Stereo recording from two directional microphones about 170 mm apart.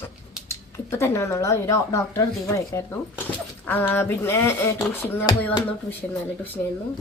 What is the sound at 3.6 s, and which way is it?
Speech, 10° left (ahead or behind).